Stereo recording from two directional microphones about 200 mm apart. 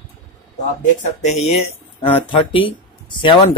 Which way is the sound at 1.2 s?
35° left (ahead or behind).